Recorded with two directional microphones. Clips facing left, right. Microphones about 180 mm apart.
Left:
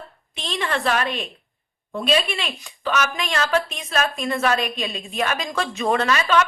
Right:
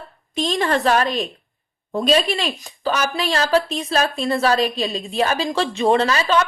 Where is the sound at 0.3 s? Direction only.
40° right (ahead or behind).